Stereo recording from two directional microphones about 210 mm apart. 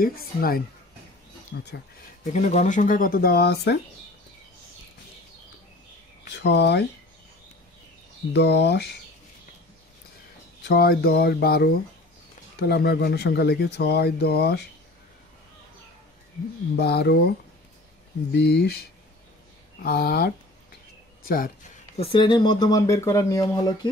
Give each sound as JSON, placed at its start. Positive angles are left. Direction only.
{"t": 0.0, "sound": "speech", "side_deg": 45}
{"t": 2.3, "sound": "speech", "side_deg": 35}
{"t": 6.2, "sound": "speech", "side_deg": 55}
{"t": 8.3, "sound": "speech", "side_deg": 55}
{"t": 10.6, "sound": "speech", "side_deg": 45}
{"t": 16.7, "sound": "speech", "side_deg": 50}
{"t": 21.9, "sound": "speech", "side_deg": 25}